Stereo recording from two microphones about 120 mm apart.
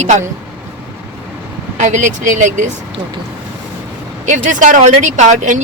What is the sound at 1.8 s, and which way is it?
Speech, 90° right.